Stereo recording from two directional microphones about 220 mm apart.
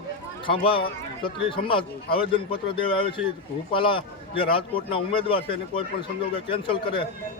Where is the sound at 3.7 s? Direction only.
25° left (ahead or behind).